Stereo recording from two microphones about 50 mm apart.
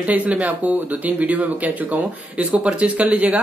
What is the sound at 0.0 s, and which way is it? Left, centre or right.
Speech, right.